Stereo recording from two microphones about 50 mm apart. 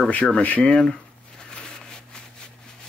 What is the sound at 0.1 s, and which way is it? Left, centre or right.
Speech, left.